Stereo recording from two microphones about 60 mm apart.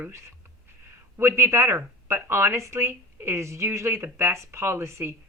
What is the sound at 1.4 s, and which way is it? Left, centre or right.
Speech, right.